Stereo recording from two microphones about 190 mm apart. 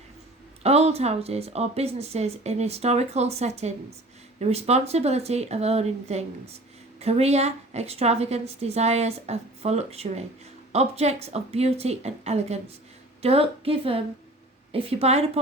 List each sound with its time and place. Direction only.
0.6 s speech: 35° right (ahead or behind)